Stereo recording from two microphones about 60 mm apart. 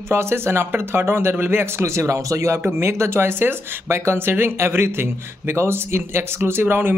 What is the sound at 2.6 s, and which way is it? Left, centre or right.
Speech, right.